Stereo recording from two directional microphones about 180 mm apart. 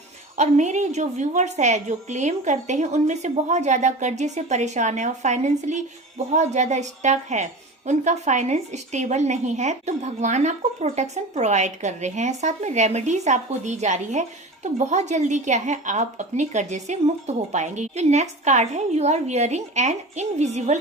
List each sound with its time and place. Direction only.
0.3 s speech: 40° right (ahead or behind)